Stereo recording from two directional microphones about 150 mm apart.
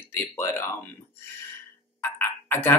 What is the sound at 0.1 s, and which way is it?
Speech, 15° left (ahead or behind).